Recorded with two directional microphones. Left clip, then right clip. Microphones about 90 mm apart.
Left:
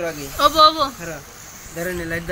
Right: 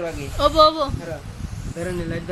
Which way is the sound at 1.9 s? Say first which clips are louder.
Left 2 dB; 5° left (ahead or behind).